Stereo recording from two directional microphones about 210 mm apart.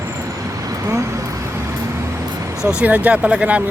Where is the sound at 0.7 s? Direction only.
15° right (ahead or behind).